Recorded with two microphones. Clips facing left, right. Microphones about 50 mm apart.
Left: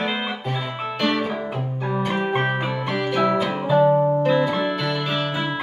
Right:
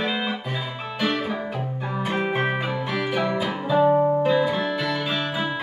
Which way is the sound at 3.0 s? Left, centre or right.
Centre.